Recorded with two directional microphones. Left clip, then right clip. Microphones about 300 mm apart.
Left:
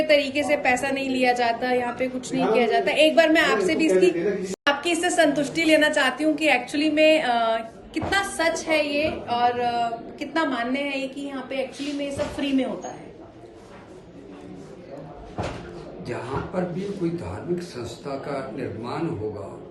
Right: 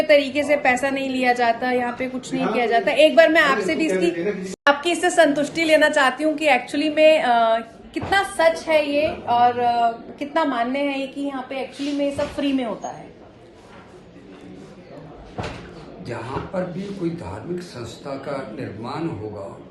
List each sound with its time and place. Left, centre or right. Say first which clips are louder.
0.1 s a woman's voice: right 5 dB; centre
16.0 s a man's voice: right 1 dB; centre